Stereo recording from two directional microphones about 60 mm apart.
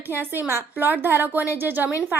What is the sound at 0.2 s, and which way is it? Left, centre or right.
A woman's voice, right.